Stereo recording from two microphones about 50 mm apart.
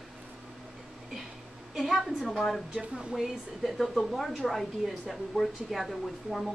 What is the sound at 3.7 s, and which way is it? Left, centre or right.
Speech, centre.